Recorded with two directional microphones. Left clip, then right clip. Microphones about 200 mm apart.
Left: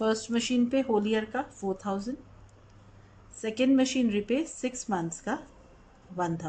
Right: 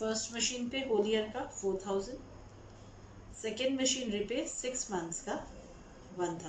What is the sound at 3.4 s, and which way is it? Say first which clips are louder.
Speech: left 7 dB; 60° left (ahead or behind).